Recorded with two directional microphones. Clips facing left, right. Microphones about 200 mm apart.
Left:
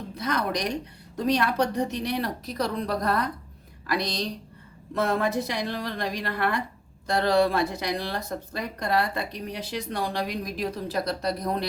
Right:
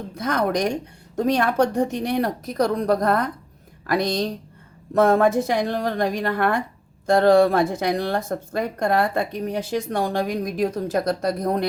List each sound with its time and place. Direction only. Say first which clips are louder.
0.1 s speech: right 5 dB; 50° right (ahead or behind)